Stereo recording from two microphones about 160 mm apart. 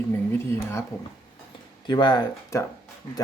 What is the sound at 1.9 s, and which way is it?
Speech, 25° left (ahead or behind).